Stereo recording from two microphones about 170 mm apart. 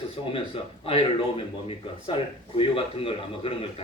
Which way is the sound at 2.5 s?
30° left (ahead or behind).